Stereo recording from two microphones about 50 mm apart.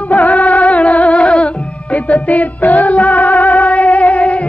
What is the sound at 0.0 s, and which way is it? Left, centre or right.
Music, left.